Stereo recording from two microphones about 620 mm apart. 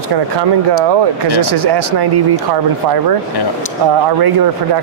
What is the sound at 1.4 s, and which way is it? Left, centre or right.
Speech, right.